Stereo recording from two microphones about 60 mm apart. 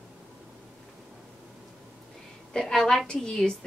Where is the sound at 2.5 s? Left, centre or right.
Centre.